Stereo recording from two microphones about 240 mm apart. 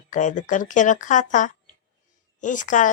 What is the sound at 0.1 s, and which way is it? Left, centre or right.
Speech, left.